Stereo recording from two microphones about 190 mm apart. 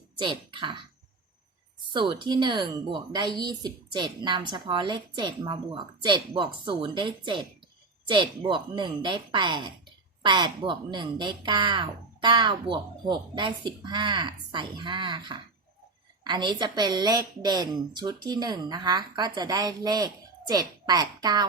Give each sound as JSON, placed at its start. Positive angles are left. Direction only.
{"t": 0.2, "sound": "a woman's voice", "side_deg": -25}
{"t": 1.9, "sound": "a woman's voice", "side_deg": -25}